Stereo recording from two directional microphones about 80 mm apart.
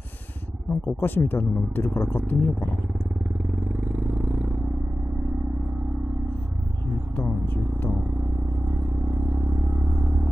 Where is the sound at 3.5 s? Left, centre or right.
Right.